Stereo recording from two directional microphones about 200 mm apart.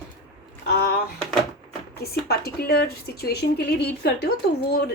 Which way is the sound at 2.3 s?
55° left (ahead or behind).